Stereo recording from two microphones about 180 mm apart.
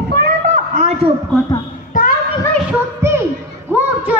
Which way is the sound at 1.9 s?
45° left (ahead or behind).